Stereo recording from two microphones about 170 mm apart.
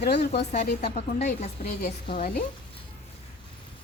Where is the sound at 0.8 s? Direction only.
40° left (ahead or behind).